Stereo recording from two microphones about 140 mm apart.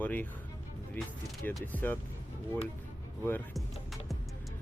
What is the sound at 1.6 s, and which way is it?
Speech, 15° left (ahead or behind).